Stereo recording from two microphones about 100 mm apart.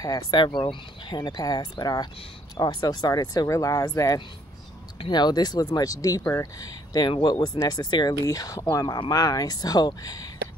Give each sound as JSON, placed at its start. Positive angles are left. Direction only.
{"t": 0.0, "sound": "speech", "side_deg": 45}